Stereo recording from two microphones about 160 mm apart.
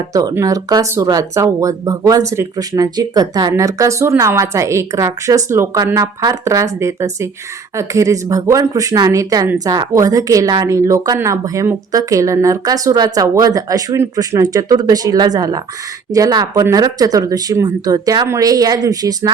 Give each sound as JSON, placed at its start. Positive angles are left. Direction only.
{"t": 0.1, "sound": "speech", "side_deg": -20}